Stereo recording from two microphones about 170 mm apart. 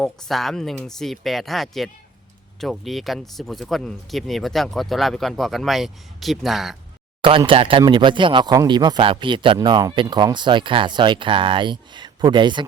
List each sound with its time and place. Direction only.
0.0 s speech: centre (ahead or behind)
7.2 s speech: 30° right (ahead or behind)